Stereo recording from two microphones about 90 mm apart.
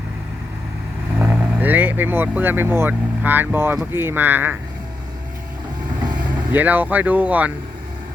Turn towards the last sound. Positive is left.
turn(degrees=-15)  # may be behind; listen again after turning